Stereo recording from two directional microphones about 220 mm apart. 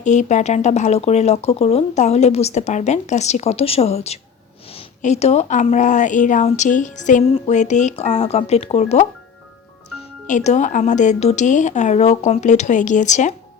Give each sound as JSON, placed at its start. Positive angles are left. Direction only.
{"t": 0.0, "sound": "a woman's voice", "side_deg": 35}
{"t": 10.2, "sound": "a woman's voice", "side_deg": 35}